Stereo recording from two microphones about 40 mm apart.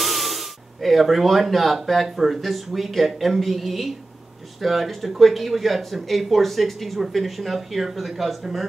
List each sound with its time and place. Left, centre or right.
0.0 s speech: centre